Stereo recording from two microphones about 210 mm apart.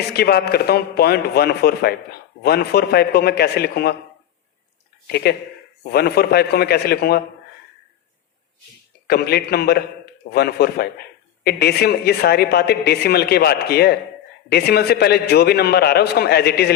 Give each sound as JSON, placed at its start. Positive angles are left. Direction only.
{"t": 0.1, "sound": "a man's voice", "side_deg": 50}
{"t": 5.0, "sound": "a man's voice", "side_deg": 50}
{"t": 9.0, "sound": "a man's voice", "side_deg": 50}